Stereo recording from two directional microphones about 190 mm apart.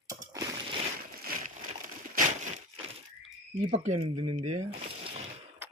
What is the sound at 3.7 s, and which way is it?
Speech, 35° right (ahead or behind).